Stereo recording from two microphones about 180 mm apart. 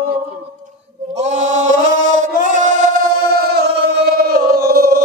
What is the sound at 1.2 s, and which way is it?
Chant, 40° right (ahead or behind).